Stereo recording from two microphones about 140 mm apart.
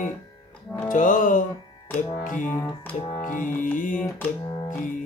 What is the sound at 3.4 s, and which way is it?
Music, 70° left (ahead or behind).